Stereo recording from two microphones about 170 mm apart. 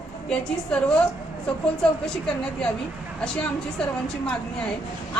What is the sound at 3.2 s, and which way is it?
Speech, 5° left (ahead or behind).